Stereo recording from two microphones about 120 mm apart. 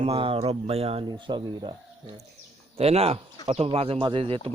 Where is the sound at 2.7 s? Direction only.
55° right (ahead or behind).